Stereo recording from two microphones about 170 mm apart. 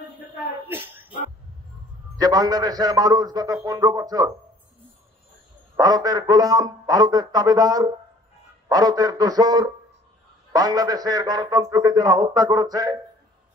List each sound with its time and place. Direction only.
0.7 s a sound: 10° right (ahead or behind)
2.1 s a man's voice: 20° right (ahead or behind)
5.8 s a man's voice: 20° right (ahead or behind)